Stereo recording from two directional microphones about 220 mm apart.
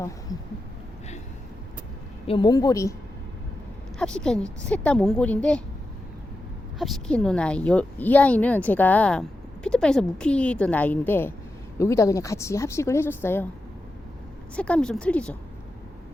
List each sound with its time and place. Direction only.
0.3 s a sound: 15° left (ahead or behind)
2.2 s speech: 20° left (ahead or behind)
3.9 s a woman's voice: 5° left (ahead or behind)
6.7 s a woman's voice: centre (ahead or behind)
14.5 s a woman's voice: 5° left (ahead or behind)